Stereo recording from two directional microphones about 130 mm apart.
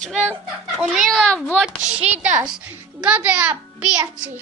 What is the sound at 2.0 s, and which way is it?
Speech, 60° right (ahead or behind).